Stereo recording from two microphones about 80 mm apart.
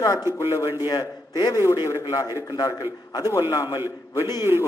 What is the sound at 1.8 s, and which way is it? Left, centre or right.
Speech, left.